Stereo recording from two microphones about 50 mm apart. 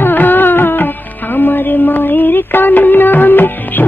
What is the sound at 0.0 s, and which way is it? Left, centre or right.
Music, left.